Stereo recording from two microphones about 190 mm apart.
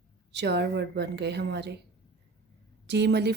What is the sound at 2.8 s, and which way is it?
Speech, 60° right (ahead or behind).